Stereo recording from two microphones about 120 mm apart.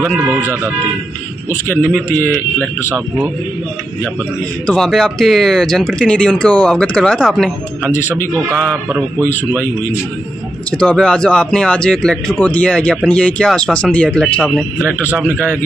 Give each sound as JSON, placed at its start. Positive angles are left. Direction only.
{"t": 0.0, "sound": "a man's voice", "side_deg": -15}
{"t": 1.8, "sound": "speech", "side_deg": -5}
{"t": 2.0, "sound": "speech", "side_deg": 15}
{"t": 4.6, "sound": "speech", "side_deg": 5}
{"t": 10.7, "sound": "speech", "side_deg": 5}